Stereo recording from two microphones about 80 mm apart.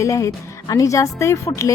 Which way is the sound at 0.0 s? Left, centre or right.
Left.